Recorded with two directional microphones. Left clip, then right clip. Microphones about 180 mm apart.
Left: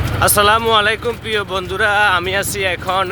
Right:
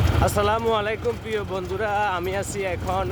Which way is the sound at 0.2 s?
10° left (ahead or behind).